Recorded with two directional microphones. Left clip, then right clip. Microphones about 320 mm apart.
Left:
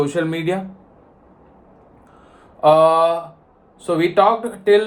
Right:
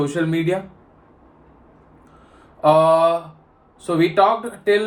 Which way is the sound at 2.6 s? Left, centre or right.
Centre.